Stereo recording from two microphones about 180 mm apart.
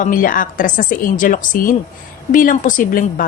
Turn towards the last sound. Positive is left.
turn(degrees=50)  # may be behind; listen again after turning